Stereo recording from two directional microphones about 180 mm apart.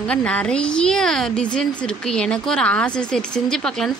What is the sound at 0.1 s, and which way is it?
A woman's voice, 5° left (ahead or behind).